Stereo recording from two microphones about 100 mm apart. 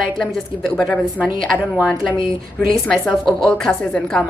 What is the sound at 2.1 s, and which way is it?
Speech, 60° left (ahead or behind).